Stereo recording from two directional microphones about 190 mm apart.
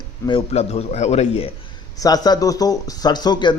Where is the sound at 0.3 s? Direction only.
30° left (ahead or behind).